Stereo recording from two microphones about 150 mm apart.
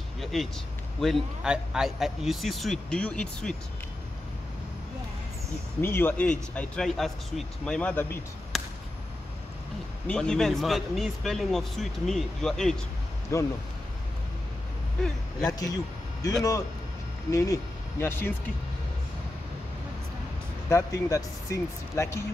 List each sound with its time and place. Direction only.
0.2 s vehicle: centre (ahead or behind)
1.0 s speech: centre (ahead or behind)
5.8 s speech: 15° left (ahead or behind)
10.0 s speech: 5° left (ahead or behind)
13.3 s speech: 20° left (ahead or behind)
15.6 s speech: 25° left (ahead or behind)
20.7 s speech: 20° left (ahead or behind)